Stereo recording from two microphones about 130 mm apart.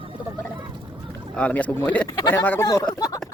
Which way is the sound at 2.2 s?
25° left (ahead or behind).